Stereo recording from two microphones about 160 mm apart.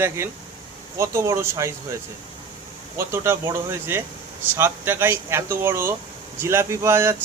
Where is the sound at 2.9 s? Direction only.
15° right (ahead or behind).